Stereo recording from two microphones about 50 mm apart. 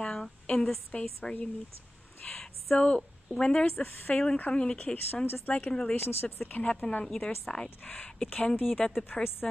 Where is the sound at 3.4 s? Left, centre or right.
Centre.